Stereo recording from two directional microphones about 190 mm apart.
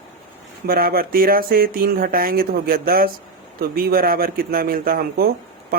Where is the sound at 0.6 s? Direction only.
50° right (ahead or behind).